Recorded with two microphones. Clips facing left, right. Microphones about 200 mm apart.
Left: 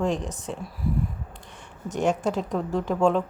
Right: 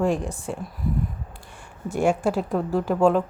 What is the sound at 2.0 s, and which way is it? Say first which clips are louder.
A woman's voice: right 3 dB; 10° right (ahead or behind).